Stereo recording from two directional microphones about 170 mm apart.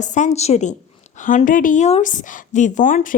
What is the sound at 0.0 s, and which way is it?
A woman's voice, 45° left (ahead or behind).